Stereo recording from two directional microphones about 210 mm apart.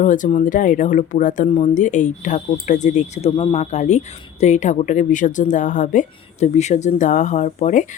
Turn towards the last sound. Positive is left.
turn(degrees=35)  # may be behind; listen again after turning